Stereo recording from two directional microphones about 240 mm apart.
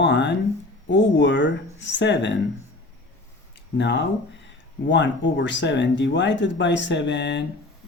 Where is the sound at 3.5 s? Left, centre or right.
Left.